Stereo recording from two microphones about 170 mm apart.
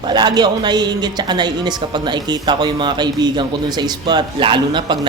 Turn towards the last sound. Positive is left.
turn(degrees=-25)  # may be behind; listen again after turning